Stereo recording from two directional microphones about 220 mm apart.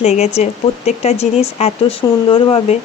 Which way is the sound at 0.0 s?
30° left (ahead or behind).